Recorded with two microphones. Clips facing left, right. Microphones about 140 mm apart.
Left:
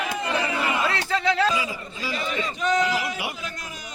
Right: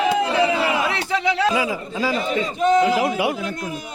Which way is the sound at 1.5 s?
60° right (ahead or behind).